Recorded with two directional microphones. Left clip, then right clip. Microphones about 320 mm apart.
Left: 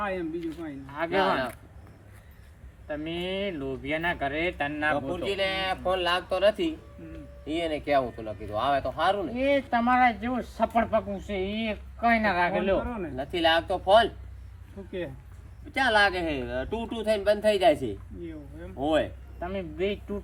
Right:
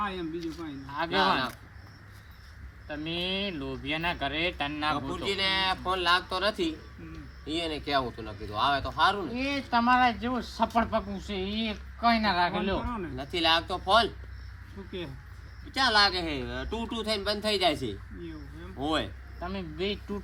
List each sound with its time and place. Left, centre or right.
0.3 s speech: centre
2.8 s speech: centre
15.8 s speech: centre
18.8 s speech: centre